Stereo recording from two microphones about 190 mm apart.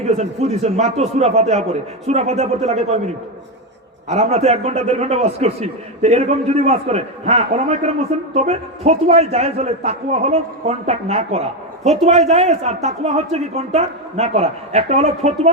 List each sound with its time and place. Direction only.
0.0 s a man's voice: 35° right (ahead or behind)
4.1 s a man's voice: 35° right (ahead or behind)